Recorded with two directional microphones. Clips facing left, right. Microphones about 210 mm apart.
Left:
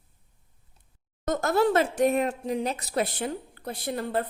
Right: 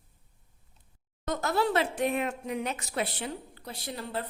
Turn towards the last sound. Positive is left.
turn(degrees=50)  # may be behind; listen again after turning